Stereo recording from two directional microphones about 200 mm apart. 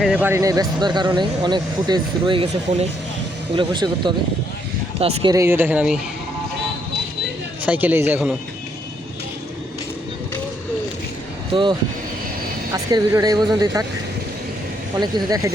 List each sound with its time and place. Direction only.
0.0 s speech: 5° right (ahead or behind); by 2.5 s 25° right (ahead or behind)
3.5 s speech: 20° right (ahead or behind)
5.3 s speech: 15° right (ahead or behind)
7.6 s speech: 10° right (ahead or behind)
11.5 s speech: 25° right (ahead or behind)
15.0 s speech: 20° right (ahead or behind)